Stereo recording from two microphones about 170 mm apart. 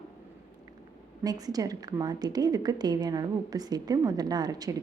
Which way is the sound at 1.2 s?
20° right (ahead or behind).